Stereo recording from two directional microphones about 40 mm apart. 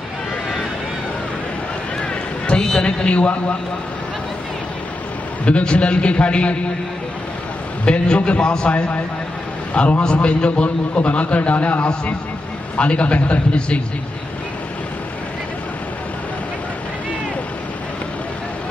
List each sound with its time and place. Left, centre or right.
2.0 s run: left
2.6 s a man's voice: left
5.4 s a man's voice: left
7.8 s a man's voice: left